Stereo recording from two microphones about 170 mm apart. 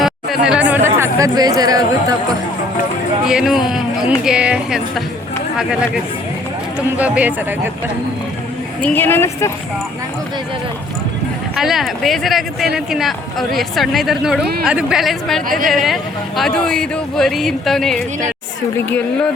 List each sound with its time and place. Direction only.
0.0 s speech: 5° right (ahead or behind); by 2.1 s 20° right (ahead or behind)
3.2 s speech: 5° right (ahead or behind)
6.7 s speech: 10° right (ahead or behind)
8.8 s a woman's voice: 10° left (ahead or behind)
11.5 s speech: centre (ahead or behind)
15.4 s speech: 55° right (ahead or behind)
15.7 s a woman's voice: centre (ahead or behind)